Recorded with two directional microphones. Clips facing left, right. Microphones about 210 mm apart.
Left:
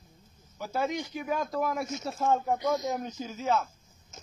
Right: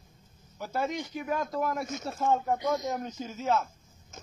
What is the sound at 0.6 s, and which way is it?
Speech, centre (ahead or behind).